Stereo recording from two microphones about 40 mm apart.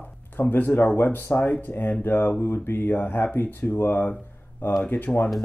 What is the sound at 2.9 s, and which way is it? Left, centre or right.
Speech, left.